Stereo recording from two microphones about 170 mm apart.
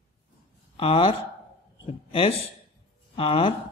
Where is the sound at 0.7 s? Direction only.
30° left (ahead or behind).